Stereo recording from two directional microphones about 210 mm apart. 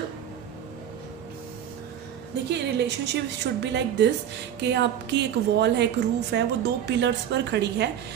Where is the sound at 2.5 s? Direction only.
55° right (ahead or behind).